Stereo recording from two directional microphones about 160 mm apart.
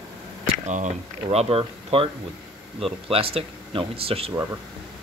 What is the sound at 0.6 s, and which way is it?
Speech, 50° right (ahead or behind).